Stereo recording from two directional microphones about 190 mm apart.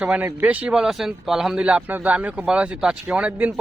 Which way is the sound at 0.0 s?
10° right (ahead or behind).